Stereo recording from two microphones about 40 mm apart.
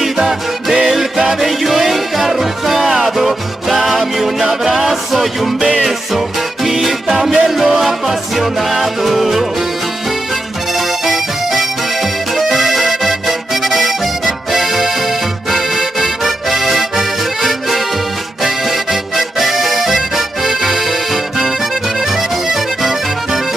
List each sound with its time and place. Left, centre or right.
0.0 s music: centre
5.6 s music: centre
11.1 s accordion: centre
22.1 s music: centre